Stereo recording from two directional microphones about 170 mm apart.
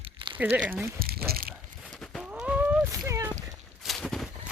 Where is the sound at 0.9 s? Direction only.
65° right (ahead or behind).